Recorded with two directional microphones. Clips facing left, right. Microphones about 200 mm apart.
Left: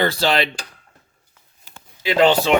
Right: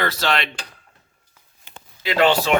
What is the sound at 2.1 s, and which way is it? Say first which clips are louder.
Speech: left 2 dB; 20° left (ahead or behind).